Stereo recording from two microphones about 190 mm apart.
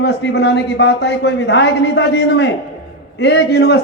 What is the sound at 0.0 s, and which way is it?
A man's voice, 60° left (ahead or behind).